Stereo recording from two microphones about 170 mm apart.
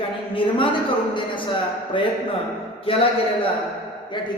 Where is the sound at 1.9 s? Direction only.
30° left (ahead or behind).